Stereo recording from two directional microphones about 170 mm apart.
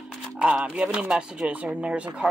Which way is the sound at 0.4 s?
5° right (ahead or behind).